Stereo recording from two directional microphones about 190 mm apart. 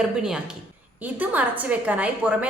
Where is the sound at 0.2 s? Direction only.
5° right (ahead or behind).